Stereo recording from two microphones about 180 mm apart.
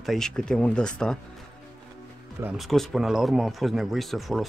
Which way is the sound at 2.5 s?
Centre (ahead or behind).